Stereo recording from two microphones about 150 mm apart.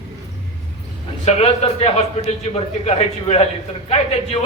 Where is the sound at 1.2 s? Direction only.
45° left (ahead or behind).